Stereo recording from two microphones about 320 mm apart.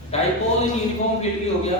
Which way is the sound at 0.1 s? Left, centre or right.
Centre.